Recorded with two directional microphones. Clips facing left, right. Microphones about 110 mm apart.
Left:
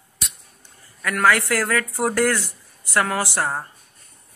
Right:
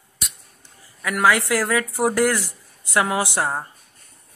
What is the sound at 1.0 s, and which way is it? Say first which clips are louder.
Speech: even; 15° right (ahead or behind).